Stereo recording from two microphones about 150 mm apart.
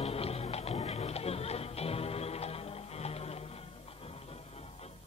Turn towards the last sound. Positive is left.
turn(degrees=45)  # may be behind; listen again after turning